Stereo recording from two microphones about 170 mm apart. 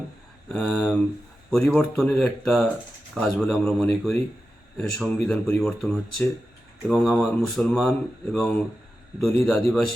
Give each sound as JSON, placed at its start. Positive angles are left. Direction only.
{"t": 0.5, "sound": "speech", "side_deg": 5}